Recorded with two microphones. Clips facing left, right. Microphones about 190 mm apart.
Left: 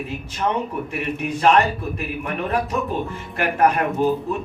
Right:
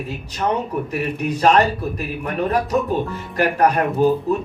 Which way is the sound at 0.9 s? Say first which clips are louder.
Right 3 dB; 40° right (ahead or behind).